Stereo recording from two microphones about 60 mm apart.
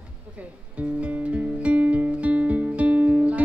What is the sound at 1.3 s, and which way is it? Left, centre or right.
Music, right.